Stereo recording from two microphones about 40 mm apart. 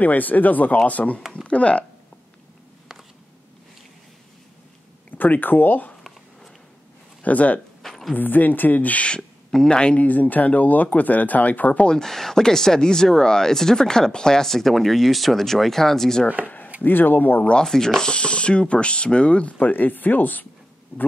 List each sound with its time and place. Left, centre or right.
0.0 s speech: left
5.1 s speech: left
7.2 s speech: left
7.8 s a sound: centre
8.1 s speech: left
9.5 s speech: centre
9.9 s speech: left
12.0 s speech: centre
16.4 s chopping: left
16.8 s speech: left
17.6 s speech: centre; by 19.5 s left
19.6 s speech: left